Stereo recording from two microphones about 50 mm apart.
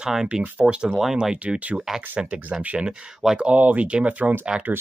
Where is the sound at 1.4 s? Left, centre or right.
Right.